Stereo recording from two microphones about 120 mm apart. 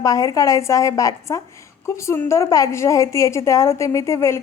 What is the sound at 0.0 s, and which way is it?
A woman's voice, 30° left (ahead or behind).